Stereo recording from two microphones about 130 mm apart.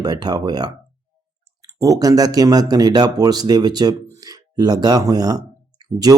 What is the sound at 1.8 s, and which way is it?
Speech, 30° right (ahead or behind).